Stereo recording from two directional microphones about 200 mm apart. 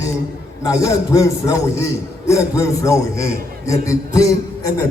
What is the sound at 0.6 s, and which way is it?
A man's voice, 15° left (ahead or behind).